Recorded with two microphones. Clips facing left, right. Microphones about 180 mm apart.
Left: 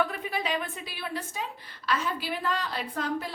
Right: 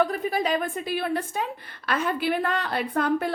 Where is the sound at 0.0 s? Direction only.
40° right (ahead or behind).